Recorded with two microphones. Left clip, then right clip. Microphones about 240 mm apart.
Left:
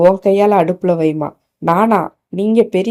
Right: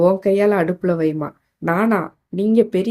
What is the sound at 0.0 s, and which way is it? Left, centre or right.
Speech, centre.